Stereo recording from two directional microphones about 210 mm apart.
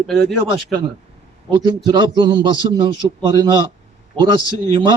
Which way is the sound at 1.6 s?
20° right (ahead or behind).